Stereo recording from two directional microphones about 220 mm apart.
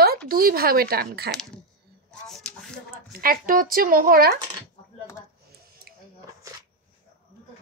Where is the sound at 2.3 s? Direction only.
Centre (ahead or behind).